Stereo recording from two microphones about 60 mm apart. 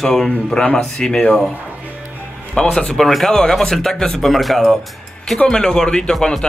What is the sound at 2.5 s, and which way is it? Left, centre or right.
A man's voice, centre.